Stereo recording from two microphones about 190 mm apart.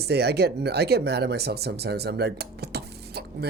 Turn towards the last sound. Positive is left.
turn(degrees=-55)  # may be behind; listen again after turning